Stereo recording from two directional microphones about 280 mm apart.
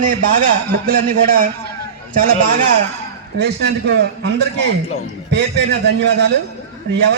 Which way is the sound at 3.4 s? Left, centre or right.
Right.